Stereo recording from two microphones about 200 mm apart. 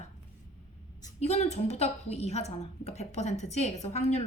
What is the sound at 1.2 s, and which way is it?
A woman's voice, 35° left (ahead or behind).